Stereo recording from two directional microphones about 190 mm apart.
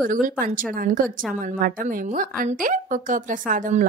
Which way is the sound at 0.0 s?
45° right (ahead or behind).